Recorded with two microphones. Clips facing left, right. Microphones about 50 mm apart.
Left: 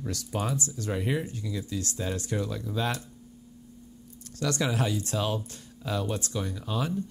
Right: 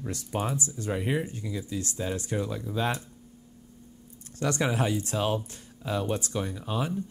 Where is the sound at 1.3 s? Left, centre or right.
Right.